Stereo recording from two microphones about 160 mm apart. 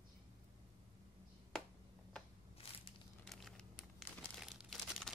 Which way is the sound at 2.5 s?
35° left (ahead or behind).